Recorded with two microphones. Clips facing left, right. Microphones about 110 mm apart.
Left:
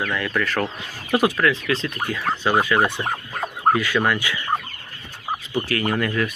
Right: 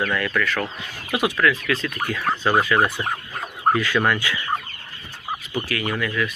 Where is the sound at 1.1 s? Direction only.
30° left (ahead or behind).